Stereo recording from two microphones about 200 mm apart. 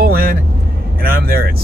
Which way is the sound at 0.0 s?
50° right (ahead or behind).